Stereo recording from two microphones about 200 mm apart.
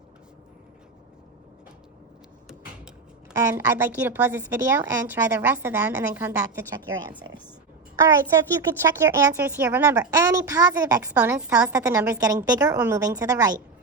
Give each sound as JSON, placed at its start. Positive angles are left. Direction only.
{"t": 3.3, "sound": "a woman's voice", "side_deg": -15}
{"t": 7.9, "sound": "a child's voice", "side_deg": -15}
{"t": 11.8, "sound": "a woman's voice", "side_deg": -15}